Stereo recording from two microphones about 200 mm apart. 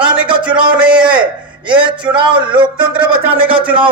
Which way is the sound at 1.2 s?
25° right (ahead or behind).